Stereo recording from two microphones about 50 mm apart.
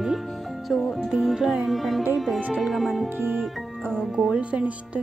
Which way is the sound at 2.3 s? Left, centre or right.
Right.